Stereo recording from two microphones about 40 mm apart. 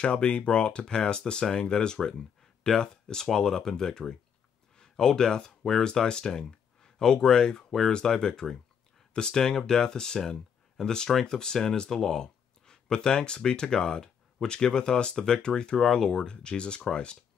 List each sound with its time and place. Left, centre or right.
0.0 s speech: left
2.0 s a sound: centre
2.8 s speech: centre
5.9 s speech: left